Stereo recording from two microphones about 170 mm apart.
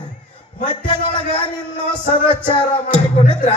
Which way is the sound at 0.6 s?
30° left (ahead or behind).